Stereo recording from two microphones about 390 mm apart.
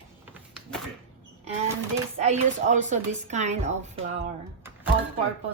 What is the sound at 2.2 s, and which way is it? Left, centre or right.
Speech, centre.